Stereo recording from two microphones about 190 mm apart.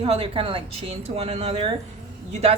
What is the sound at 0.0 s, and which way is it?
A woman's voice, 30° right (ahead or behind).